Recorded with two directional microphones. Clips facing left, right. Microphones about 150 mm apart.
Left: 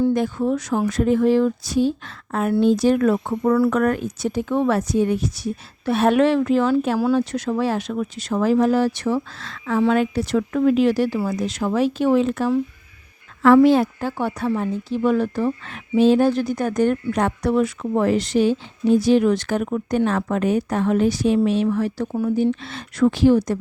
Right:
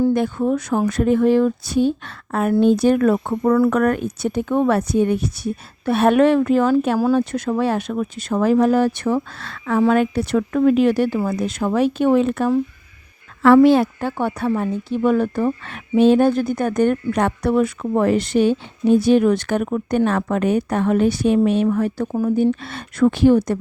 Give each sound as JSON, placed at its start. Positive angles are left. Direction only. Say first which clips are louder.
{"t": 0.1, "sound": "speech", "louder": "right 2 dB", "side_deg": -60}